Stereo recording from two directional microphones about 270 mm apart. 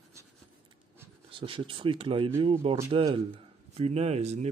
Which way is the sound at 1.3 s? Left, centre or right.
Centre.